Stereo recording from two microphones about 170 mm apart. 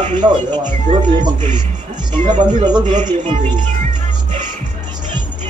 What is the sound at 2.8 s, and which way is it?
Speech, 45° right (ahead or behind).